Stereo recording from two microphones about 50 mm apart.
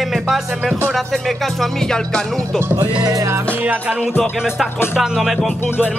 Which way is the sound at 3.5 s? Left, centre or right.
Right.